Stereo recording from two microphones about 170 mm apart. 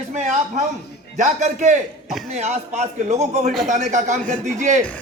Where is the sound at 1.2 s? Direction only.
45° right (ahead or behind).